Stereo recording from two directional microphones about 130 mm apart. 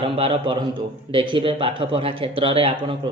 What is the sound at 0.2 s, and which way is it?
A man's voice, 40° right (ahead or behind).